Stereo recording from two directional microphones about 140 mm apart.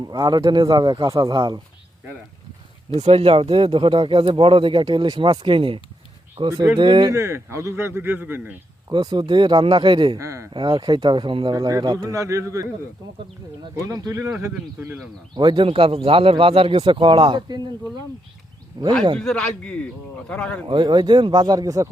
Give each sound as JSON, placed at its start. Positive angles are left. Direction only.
{"t": 0.0, "sound": "speech", "side_deg": -30}
{"t": 2.9, "sound": "speech", "side_deg": -45}
{"t": 6.5, "sound": "a man's voice", "side_deg": -25}
{"t": 6.7, "sound": "speech", "side_deg": -35}
{"t": 7.1, "sound": "speech", "side_deg": -20}
{"t": 8.9, "sound": "speech", "side_deg": -30}
{"t": 10.2, "sound": "a man's voice", "side_deg": -20}
{"t": 10.5, "sound": "speech", "side_deg": -35}
{"t": 13.7, "sound": "a man's voice", "side_deg": -25}
{"t": 15.4, "sound": "speech", "side_deg": -35}
{"t": 18.8, "sound": "a man's voice", "side_deg": -30}
{"t": 19.2, "sound": "a man's voice", "side_deg": 5}
{"t": 20.7, "sound": "speech", "side_deg": -30}